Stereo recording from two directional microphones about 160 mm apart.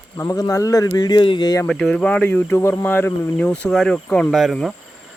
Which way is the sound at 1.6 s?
5° left (ahead or behind).